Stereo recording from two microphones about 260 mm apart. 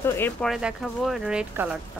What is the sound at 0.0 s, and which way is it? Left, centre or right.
Speech, centre.